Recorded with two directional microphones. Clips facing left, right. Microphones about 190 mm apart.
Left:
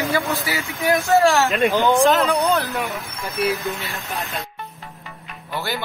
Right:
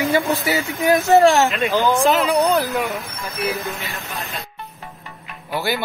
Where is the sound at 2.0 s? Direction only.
Centre (ahead or behind).